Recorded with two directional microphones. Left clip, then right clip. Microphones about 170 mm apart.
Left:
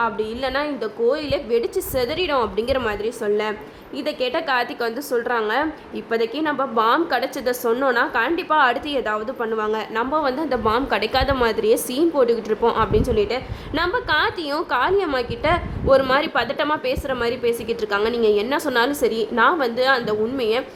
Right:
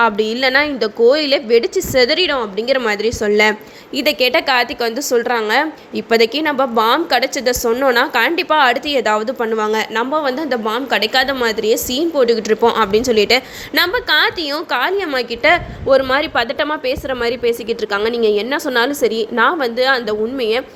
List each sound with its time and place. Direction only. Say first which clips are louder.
0.0 s a woman's voice: right 8 dB; 20° right (ahead or behind)
2.4 s a woman's voice: right 4 dB; 5° right (ahead or behind)
2.8 s a woman's voice: right 6 dB; 20° right (ahead or behind)